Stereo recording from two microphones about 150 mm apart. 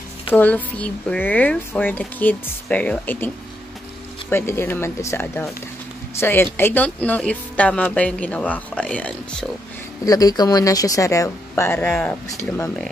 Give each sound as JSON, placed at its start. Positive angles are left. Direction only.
{"t": 0.3, "sound": "speech", "side_deg": 10}
{"t": 4.3, "sound": "speech", "side_deg": 15}
{"t": 10.0, "sound": "speech", "side_deg": 25}